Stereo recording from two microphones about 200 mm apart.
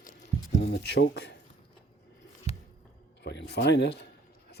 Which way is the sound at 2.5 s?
30° left (ahead or behind).